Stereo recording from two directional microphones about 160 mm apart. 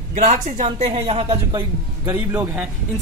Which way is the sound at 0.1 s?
45° right (ahead or behind).